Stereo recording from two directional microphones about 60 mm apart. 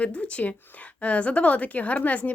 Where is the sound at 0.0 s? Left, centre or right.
Centre.